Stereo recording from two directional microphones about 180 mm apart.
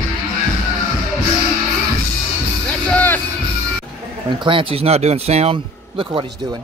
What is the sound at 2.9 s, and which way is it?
Music, 10° left (ahead or behind).